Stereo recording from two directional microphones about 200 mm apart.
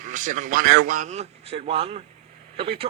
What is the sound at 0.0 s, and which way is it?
A man's voice, 40° right (ahead or behind).